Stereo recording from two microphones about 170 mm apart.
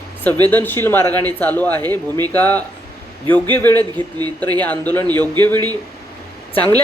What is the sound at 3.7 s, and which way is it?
Speech, 25° right (ahead or behind).